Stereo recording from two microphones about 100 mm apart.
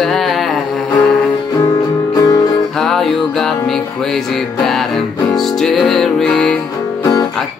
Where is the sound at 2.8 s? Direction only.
5° left (ahead or behind).